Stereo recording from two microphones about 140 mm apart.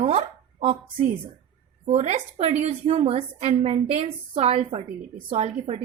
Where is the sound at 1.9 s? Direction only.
50° right (ahead or behind).